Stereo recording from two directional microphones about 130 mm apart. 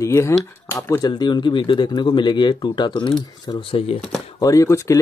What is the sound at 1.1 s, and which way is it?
Speech, 35° left (ahead or behind).